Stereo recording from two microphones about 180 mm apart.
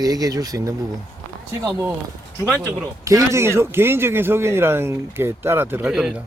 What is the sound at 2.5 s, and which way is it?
Speech, 5° right (ahead or behind).